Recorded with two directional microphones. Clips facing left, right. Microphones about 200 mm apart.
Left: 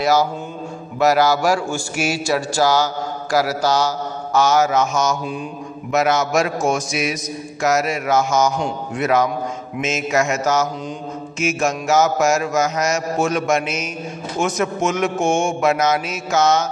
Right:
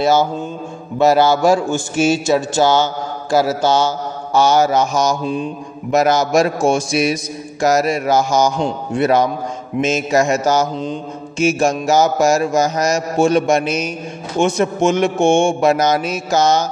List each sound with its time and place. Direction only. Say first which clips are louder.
0.0 s a man's voice: right 3 dB; 25° right (ahead or behind)
5.9 s mantra: right 4 dB; 35° right (ahead or behind)